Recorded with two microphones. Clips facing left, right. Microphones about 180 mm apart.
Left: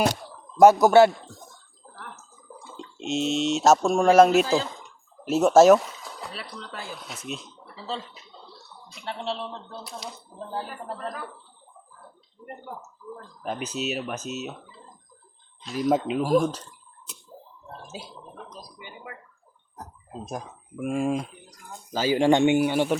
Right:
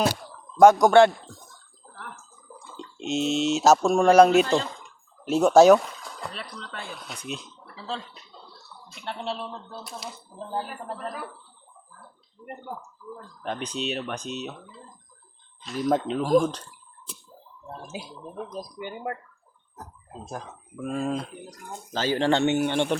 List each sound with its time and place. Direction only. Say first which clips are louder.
0.6 s speech: even; 5° left (ahead or behind)
13.1 s speech: even; 5° left (ahead or behind)
15.6 s speech: left 1 dB; centre (ahead or behind)
18.8 s speech: right 11 dB; 55° right (ahead or behind)
20.2 s speech: left 1 dB; 15° left (ahead or behind)